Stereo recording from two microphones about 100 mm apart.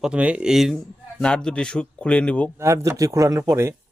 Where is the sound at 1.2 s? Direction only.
10° left (ahead or behind).